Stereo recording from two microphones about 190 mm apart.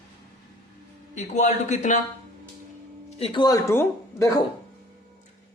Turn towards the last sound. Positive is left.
turn(degrees=15)  # may be behind; listen again after turning